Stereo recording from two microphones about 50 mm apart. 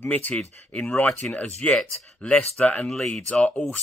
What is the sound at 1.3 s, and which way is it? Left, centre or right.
Speech, left.